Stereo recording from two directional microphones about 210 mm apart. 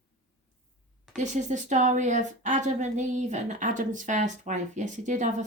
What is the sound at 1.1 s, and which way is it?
Speech, 35° right (ahead or behind).